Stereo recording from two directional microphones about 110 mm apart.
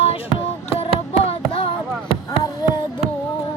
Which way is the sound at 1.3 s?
55° left (ahead or behind).